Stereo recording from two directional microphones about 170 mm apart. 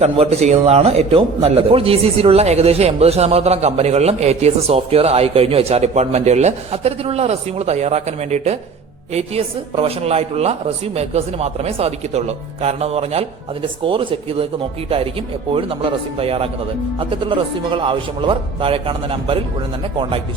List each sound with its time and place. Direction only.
0.0 s a man's voice: 40° right (ahead or behind)